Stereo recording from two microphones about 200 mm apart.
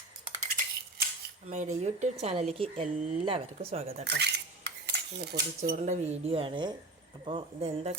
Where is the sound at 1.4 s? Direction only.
35° right (ahead or behind).